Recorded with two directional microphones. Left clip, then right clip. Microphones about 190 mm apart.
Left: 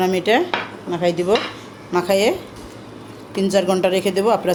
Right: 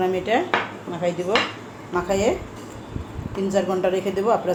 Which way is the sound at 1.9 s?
50° left (ahead or behind).